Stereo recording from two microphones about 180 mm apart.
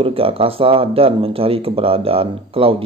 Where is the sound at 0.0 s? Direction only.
30° right (ahead or behind).